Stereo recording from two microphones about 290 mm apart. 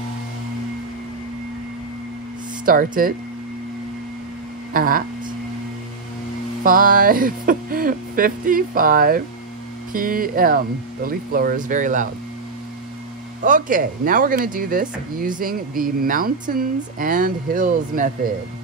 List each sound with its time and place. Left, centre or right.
2.6 s speech: right
4.7 s speech: right
6.6 s speech: right
13.4 s speech: right